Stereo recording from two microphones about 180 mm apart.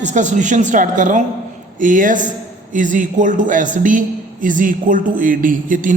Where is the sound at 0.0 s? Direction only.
40° right (ahead or behind).